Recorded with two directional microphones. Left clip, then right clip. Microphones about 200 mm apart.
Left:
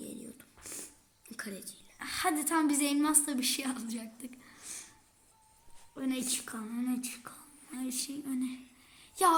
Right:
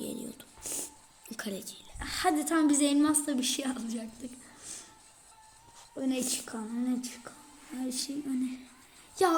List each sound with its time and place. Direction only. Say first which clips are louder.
0.0 s a sound: right 7 dB; 25° right (ahead or behind)
1.3 s a woman's voice: right 4 dB; 20° right (ahead or behind)
2.0 s a woman's voice: right 3 dB; 5° left (ahead or behind)
6.2 s speech: right 2 dB; 10° left (ahead or behind)